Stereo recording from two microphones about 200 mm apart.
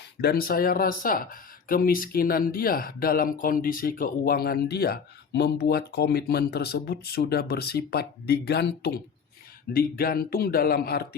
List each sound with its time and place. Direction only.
0.2 s speech: 50° left (ahead or behind)